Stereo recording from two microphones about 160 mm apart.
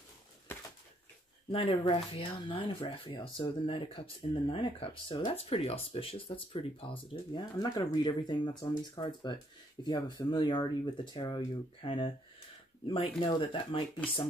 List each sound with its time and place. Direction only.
1.5 s speech: 35° left (ahead or behind)